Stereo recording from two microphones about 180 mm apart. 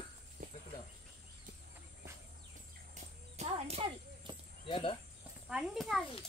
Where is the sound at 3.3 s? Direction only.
35° right (ahead or behind).